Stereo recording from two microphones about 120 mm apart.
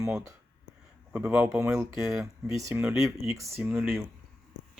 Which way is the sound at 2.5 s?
25° right (ahead or behind).